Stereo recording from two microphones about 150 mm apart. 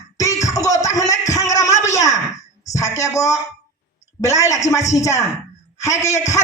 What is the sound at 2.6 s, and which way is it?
Speech, 20° left (ahead or behind).